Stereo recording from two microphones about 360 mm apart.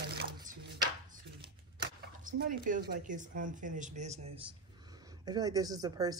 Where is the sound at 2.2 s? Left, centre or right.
Right.